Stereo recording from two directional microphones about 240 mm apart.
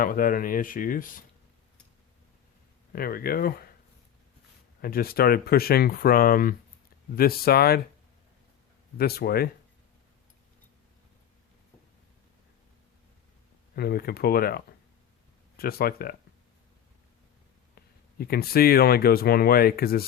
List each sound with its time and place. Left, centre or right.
0.0 s speech: left
2.9 s speech: left
4.8 s speech: left
9.0 s speech: left
13.7 s speech: left
18.2 s speech: left